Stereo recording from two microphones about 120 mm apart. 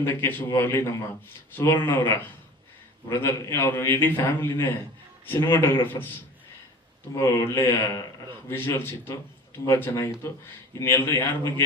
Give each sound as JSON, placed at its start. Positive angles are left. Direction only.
{"t": 0.0, "sound": "a man's voice", "side_deg": 20}
{"t": 7.2, "sound": "a man's voice", "side_deg": 25}